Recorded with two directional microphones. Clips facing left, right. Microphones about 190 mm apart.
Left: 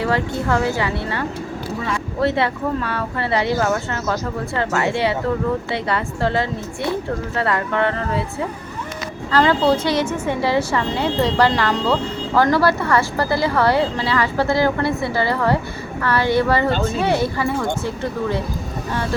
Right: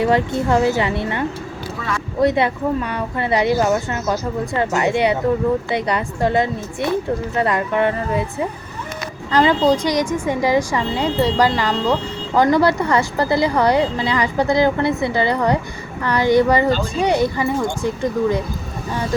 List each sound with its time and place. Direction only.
0.0 s speech: 20° right (ahead or behind)
2.2 s speech: 15° right (ahead or behind)
9.3 s speech: 15° right (ahead or behind)